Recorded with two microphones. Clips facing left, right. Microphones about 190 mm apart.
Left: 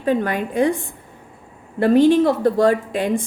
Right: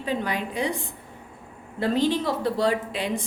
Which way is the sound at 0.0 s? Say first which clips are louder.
Left 7 dB; 50° left (ahead or behind).